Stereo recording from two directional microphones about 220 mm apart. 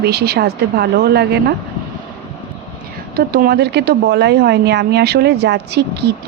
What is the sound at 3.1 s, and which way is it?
A woman's voice, 45° right (ahead or behind).